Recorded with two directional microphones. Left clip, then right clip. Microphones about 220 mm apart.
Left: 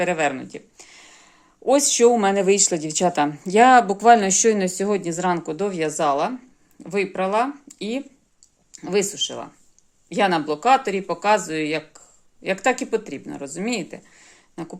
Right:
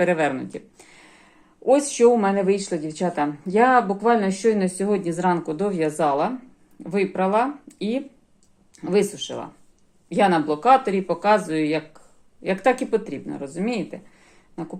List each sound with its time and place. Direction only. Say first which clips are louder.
0.0 s a sound: right 1 dB; 15° left (ahead or behind)
1.6 s speech: left 1 dB; 30° left (ahead or behind)
2.0 s speech: even; 45° left (ahead or behind); by 14.0 s 25° left (ahead or behind)